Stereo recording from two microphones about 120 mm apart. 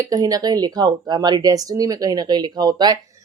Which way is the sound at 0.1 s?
30° right (ahead or behind).